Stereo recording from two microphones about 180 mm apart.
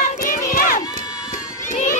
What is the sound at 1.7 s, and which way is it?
Crowd, 45° left (ahead or behind).